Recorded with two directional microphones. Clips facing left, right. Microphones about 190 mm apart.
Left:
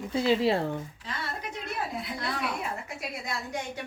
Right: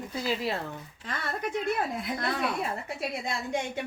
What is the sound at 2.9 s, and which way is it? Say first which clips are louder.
Speech: right 3 dB; 25° right (ahead or behind).